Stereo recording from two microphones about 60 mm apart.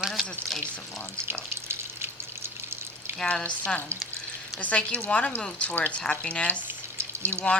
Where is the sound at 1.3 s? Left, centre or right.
Right.